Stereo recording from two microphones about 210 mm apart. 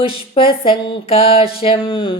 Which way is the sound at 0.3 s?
25° left (ahead or behind).